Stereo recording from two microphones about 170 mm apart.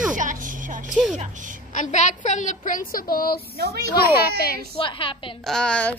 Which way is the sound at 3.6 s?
70° right (ahead or behind).